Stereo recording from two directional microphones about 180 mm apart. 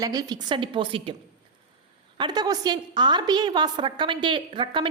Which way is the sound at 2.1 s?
25° right (ahead or behind).